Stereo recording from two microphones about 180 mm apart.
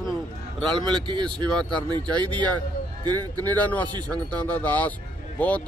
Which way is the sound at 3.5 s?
10° left (ahead or behind).